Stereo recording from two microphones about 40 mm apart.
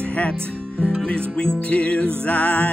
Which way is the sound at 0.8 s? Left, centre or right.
Centre.